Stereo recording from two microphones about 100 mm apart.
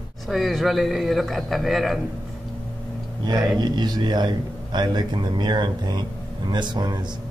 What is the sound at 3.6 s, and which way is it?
A man's voice, 45° right (ahead or behind).